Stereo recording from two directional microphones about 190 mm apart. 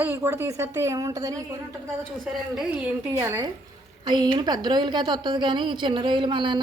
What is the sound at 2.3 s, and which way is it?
Speech, centre (ahead or behind).